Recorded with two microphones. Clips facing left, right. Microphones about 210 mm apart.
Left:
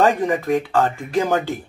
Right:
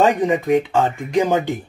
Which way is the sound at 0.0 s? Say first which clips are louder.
Right 1 dB; 20° right (ahead or behind).